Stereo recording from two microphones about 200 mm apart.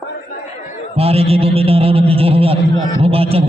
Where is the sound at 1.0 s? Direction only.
30° right (ahead or behind).